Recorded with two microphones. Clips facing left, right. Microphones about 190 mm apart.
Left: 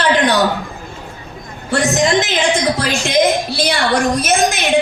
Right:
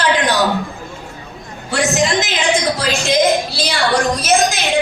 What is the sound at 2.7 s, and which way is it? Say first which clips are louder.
A woman's voice: left 1 dB; 60° left (ahead or behind).